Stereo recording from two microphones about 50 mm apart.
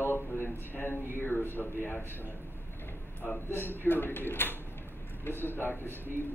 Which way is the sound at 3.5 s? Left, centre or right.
Left.